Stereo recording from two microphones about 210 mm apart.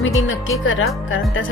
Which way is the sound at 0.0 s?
60° left (ahead or behind).